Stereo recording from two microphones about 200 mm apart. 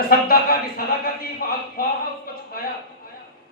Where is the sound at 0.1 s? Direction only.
50° left (ahead or behind).